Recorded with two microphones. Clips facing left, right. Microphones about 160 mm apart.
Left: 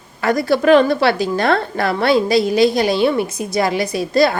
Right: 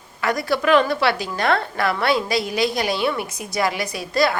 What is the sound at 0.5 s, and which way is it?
A woman's voice, 40° left (ahead or behind).